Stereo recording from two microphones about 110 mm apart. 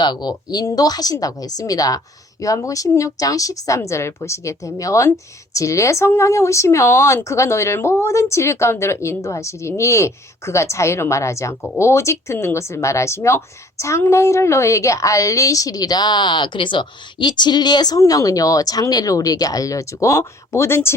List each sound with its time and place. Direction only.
0.0 s a woman's voice: 40° left (ahead or behind); by 20.9 s 25° left (ahead or behind)